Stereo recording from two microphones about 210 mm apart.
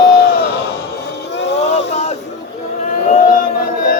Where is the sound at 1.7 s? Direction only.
35° left (ahead or behind).